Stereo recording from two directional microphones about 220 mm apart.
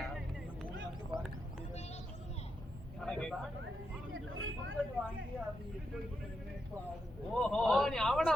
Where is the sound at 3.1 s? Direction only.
5° left (ahead or behind).